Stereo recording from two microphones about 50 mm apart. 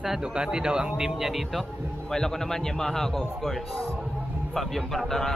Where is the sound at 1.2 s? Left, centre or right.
Centre.